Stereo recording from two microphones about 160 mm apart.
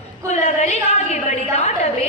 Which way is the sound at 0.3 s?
45° left (ahead or behind).